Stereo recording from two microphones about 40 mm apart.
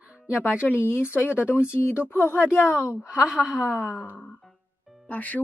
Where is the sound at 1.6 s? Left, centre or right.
Left.